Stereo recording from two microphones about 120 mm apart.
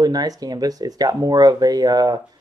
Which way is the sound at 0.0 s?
35° right (ahead or behind).